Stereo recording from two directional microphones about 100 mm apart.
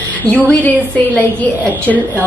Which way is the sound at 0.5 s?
15° left (ahead or behind).